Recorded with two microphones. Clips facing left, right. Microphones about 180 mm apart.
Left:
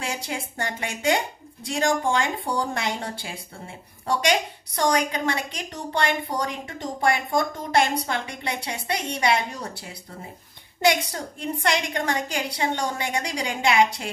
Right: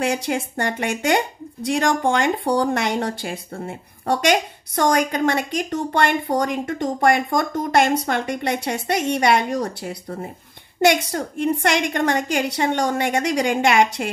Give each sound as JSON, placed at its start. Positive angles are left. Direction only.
{"t": 0.0, "sound": "speech", "side_deg": -60}